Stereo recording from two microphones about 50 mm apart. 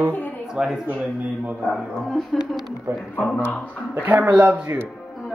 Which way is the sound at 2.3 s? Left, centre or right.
Centre.